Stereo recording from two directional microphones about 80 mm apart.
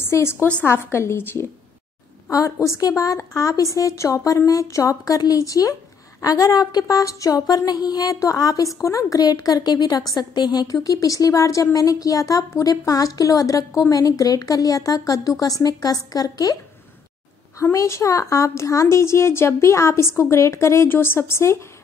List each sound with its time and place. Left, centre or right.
0.0 s a woman's voice: left
2.3 s a sound: left
17.7 s a woman's voice: left